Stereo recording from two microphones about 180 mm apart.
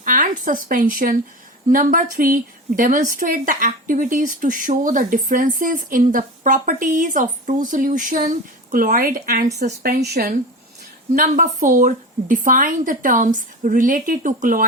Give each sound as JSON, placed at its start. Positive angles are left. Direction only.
{"t": 0.0, "sound": "a woman's voice", "side_deg": -50}